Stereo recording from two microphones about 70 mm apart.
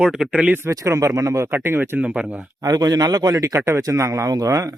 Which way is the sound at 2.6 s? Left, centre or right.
Right.